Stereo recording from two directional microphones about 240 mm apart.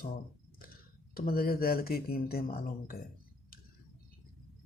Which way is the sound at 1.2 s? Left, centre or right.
Left.